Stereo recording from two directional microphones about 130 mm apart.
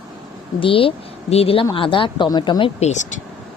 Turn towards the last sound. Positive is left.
turn(degrees=60)  # may be behind; listen again after turning